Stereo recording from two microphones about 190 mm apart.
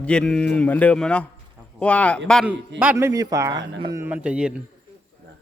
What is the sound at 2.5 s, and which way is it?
Speech, 10° right (ahead or behind).